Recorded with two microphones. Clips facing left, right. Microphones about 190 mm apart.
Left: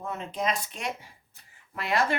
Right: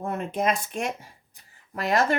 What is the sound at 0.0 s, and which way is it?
Speech, 55° right (ahead or behind).